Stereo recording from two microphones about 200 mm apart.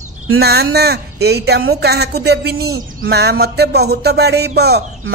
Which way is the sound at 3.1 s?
55° right (ahead or behind).